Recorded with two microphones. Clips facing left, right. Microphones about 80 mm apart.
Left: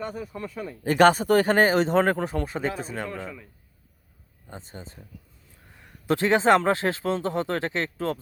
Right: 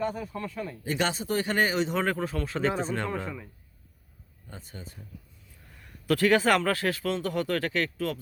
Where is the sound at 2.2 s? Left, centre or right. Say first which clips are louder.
Left 3 dB; left.